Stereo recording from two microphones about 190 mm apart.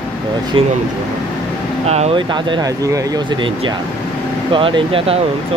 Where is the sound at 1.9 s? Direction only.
30° right (ahead or behind).